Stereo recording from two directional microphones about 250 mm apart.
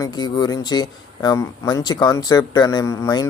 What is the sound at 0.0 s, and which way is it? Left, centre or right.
Speech, centre.